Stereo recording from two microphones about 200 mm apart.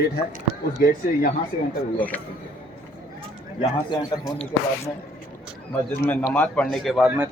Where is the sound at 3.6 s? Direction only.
25° left (ahead or behind).